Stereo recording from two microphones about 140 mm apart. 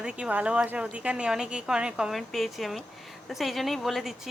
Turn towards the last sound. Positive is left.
turn(degrees=0)  # may be behind; listen again after turning